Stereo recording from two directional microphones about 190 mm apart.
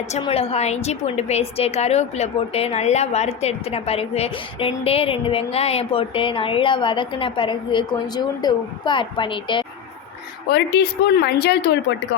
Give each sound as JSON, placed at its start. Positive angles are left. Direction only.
{"t": 0.1, "sound": "a woman's voice", "side_deg": 30}
{"t": 10.5, "sound": "speech", "side_deg": 60}